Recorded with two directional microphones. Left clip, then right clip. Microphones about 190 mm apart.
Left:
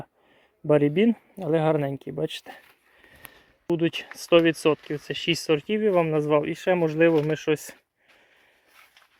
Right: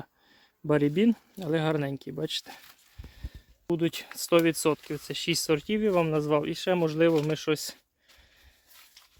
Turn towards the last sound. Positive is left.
turn(degrees=-15)  # may be behind; listen again after turning